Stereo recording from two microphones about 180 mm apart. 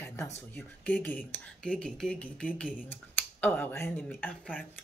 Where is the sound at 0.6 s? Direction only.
10° left (ahead or behind).